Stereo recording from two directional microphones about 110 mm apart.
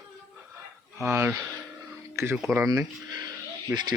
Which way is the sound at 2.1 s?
20° right (ahead or behind).